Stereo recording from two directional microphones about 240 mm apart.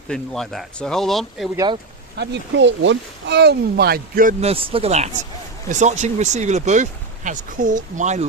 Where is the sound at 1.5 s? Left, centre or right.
Centre.